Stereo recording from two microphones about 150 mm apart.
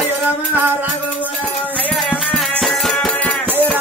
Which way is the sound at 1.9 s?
Centre (ahead or behind).